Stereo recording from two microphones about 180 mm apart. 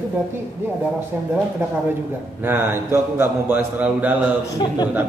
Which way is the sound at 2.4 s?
10° right (ahead or behind).